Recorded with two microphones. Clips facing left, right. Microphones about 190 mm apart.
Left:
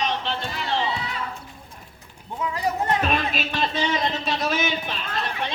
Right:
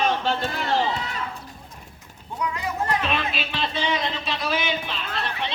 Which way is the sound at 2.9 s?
45° left (ahead or behind).